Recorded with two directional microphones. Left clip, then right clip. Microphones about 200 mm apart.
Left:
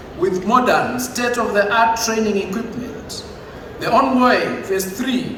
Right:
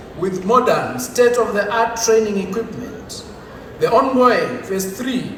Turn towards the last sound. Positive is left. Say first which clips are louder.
# left 2 dB
turn(degrees=25)  # may be behind; listen again after turning